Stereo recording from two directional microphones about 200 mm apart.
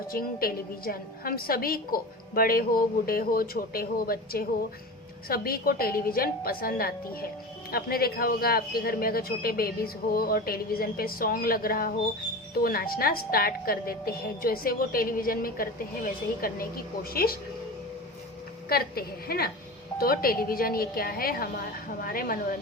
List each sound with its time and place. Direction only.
0.1 s a woman's voice: 45° left (ahead or behind)
18.7 s a woman's voice: 50° left (ahead or behind)